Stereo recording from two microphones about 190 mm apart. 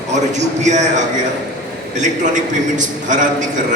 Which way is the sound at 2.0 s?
40° right (ahead or behind).